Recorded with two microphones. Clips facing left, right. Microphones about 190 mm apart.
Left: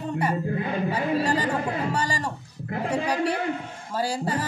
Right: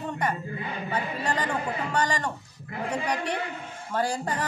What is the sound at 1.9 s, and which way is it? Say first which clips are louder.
Speech: even; 10° left (ahead or behind).